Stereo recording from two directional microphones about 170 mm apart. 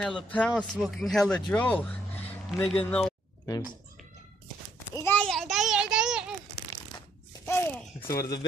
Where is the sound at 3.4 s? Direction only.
20° left (ahead or behind).